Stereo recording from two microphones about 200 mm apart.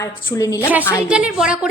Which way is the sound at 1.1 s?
5° right (ahead or behind).